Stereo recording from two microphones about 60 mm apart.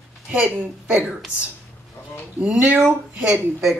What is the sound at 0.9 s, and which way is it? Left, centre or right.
Speech, right.